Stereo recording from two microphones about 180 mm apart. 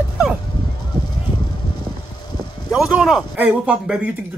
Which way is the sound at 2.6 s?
Centre (ahead or behind).